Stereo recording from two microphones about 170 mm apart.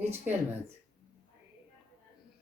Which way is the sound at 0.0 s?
10° right (ahead or behind).